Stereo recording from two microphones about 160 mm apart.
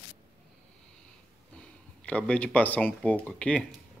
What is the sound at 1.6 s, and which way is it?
Speech, 5° left (ahead or behind).